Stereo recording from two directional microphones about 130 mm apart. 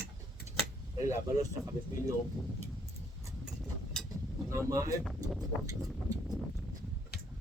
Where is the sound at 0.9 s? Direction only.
25° right (ahead or behind).